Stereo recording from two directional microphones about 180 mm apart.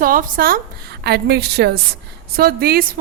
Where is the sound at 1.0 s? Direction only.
65° right (ahead or behind).